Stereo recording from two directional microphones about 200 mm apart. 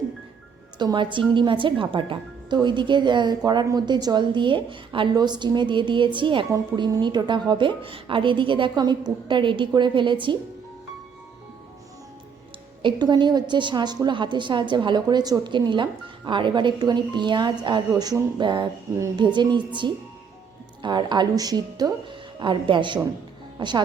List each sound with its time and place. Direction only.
0.8 s a woman's voice: 25° right (ahead or behind)
12.8 s a woman's voice: 20° right (ahead or behind)